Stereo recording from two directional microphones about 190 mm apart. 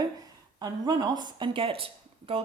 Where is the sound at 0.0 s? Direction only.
20° right (ahead or behind).